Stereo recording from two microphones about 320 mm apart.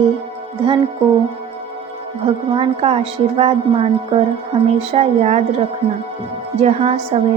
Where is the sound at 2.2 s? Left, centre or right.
Centre.